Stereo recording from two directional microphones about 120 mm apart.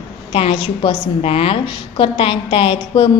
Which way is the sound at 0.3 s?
50° left (ahead or behind).